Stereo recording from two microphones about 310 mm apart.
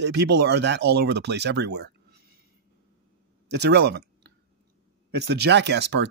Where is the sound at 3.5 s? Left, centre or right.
Right.